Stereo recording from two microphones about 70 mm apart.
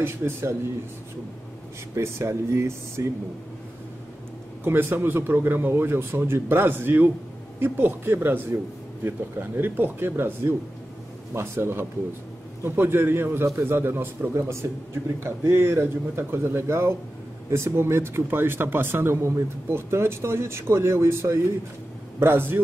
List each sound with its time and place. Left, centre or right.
0.0 s speech: right
2.0 s speech: right
4.6 s speech: right